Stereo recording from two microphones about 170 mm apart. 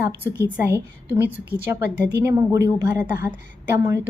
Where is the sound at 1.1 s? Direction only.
10° right (ahead or behind).